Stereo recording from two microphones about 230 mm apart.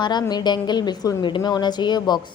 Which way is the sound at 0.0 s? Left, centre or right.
Centre.